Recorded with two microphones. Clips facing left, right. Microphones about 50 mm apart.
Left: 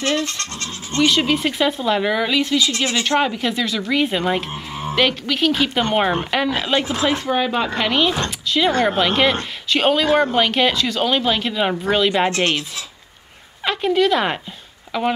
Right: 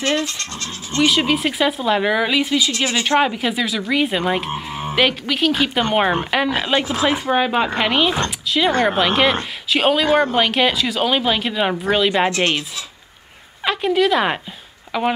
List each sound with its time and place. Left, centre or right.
0.0 s speech: right
0.9 s a woman's voice: centre
13.7 s a woman's voice: centre